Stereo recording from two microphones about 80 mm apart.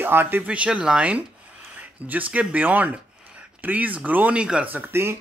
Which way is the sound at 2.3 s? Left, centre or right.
Centre.